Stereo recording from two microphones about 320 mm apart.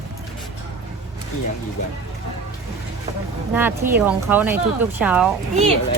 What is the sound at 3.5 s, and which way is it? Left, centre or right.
Speech, centre.